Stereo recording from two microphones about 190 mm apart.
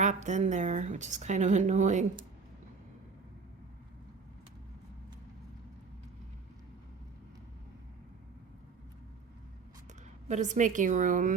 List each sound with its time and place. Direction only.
0.0 s a woman's voice: 40° right (ahead or behind)
10.2 s a woman's voice: 40° right (ahead or behind)